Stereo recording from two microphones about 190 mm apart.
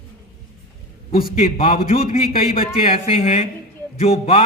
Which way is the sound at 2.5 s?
30° left (ahead or behind).